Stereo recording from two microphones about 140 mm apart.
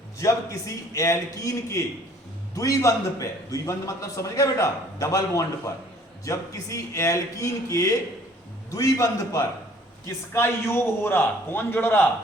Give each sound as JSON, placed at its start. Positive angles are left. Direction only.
{"t": 0.2, "sound": "a man's voice", "side_deg": 25}